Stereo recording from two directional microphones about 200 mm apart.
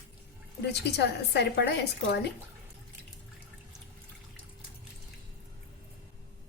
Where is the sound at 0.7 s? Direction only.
55° left (ahead or behind).